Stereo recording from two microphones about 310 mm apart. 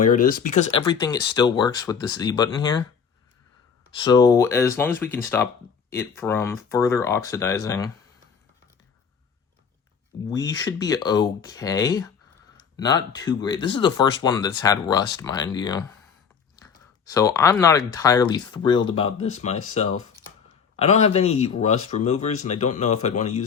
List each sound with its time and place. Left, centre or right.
0.1 s speech: left
0.7 s speech: centre
3.9 s speech: centre
10.2 s speech: centre
17.2 s speech: centre